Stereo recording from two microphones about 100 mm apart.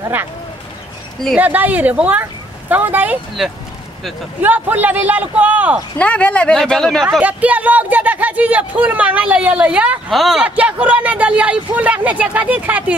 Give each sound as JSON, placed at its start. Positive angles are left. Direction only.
{"t": 1.4, "sound": "speech", "side_deg": -15}
{"t": 4.4, "sound": "speech", "side_deg": -15}
{"t": 5.9, "sound": "speech", "side_deg": 15}
{"t": 7.1, "sound": "speech", "side_deg": -15}
{"t": 10.1, "sound": "speech", "side_deg": 0}
{"t": 10.4, "sound": "speech", "side_deg": -15}